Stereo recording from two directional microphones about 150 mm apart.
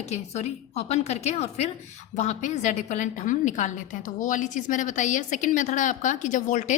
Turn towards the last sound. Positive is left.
turn(degrees=55)  # may be behind; listen again after turning